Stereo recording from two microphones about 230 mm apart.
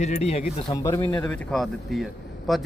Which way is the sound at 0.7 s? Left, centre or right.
Centre.